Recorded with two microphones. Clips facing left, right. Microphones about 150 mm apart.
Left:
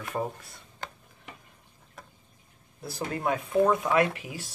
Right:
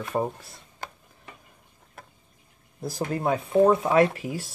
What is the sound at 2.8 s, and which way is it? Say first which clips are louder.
Speech: right 4 dB; 40° right (ahead or behind).